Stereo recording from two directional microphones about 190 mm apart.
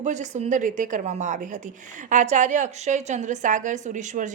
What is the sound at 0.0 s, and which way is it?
A woman's voice, 40° right (ahead or behind).